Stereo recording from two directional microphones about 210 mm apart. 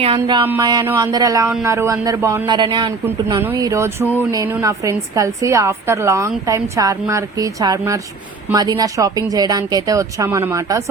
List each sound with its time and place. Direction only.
0.0 s music: 25° right (ahead or behind)
0.4 s a man's voice: 10° right (ahead or behind)